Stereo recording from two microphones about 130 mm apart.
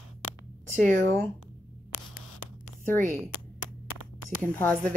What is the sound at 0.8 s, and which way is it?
Speech, 20° left (ahead or behind).